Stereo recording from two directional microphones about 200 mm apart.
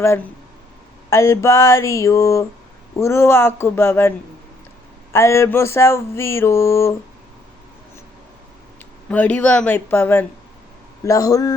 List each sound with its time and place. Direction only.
0.0 s mantra: 15° left (ahead or behind)
5.1 s mantra: 15° left (ahead or behind)
9.0 s mantra: 10° left (ahead or behind)